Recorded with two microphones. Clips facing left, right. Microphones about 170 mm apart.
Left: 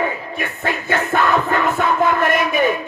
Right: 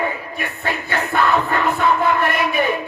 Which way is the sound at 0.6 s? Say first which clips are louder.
Left 3 dB; 45° left (ahead or behind).